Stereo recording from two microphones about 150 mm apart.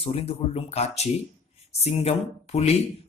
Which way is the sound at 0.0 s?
40° left (ahead or behind).